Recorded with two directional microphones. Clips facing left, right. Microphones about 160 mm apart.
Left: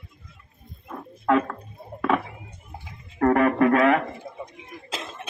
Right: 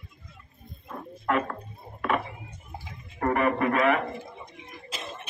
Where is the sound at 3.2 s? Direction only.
90° left.